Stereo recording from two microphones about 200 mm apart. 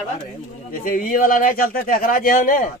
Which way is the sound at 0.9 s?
45° left (ahead or behind).